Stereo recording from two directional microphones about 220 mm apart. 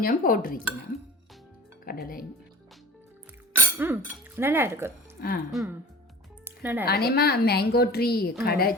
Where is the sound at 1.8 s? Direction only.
40° left (ahead or behind).